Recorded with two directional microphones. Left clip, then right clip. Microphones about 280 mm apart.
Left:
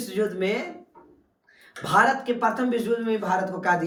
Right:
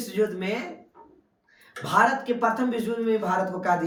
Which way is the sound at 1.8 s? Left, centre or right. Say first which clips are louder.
Left 1 dB; centre.